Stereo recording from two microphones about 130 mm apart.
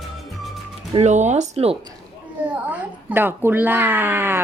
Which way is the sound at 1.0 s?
65° right (ahead or behind).